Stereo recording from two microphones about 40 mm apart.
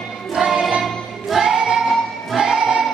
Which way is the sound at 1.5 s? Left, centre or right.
Centre.